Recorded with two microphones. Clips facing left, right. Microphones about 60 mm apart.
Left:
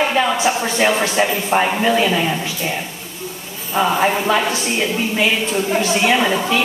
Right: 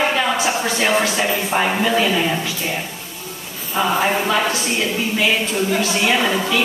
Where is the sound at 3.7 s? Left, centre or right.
Centre.